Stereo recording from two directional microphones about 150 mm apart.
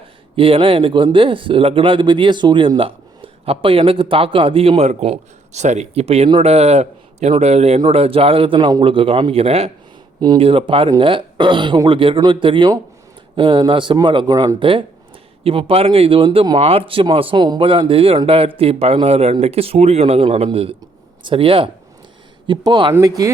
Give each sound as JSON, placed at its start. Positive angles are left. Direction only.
{"t": 0.3, "sound": "speech", "side_deg": -35}
{"t": 10.2, "sound": "speech", "side_deg": -30}